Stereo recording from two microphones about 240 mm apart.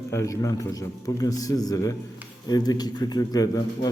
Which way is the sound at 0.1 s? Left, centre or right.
Centre.